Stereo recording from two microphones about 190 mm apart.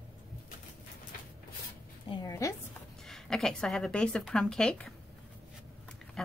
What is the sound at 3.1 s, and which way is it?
Speech, centre (ahead or behind).